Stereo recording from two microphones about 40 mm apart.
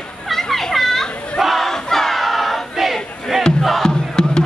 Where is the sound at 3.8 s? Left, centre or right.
Centre.